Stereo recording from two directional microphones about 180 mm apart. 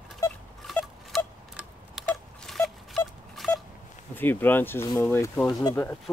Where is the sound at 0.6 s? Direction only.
Centre (ahead or behind).